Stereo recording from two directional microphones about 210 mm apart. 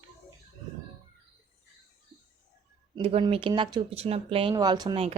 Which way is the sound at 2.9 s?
25° right (ahead or behind).